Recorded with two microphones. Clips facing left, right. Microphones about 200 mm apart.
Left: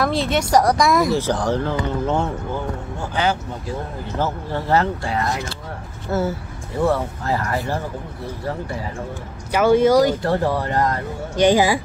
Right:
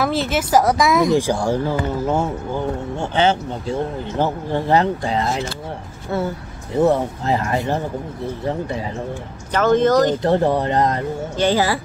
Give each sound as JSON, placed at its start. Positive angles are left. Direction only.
{"t": 0.0, "sound": "speech", "side_deg": 0}
{"t": 3.0, "sound": "speech", "side_deg": -25}
{"t": 6.1, "sound": "speech", "side_deg": 0}
{"t": 6.8, "sound": "speech", "side_deg": -20}
{"t": 9.5, "sound": "speech", "side_deg": 10}
{"t": 10.2, "sound": "speech", "side_deg": -20}
{"t": 11.3, "sound": "speech", "side_deg": 15}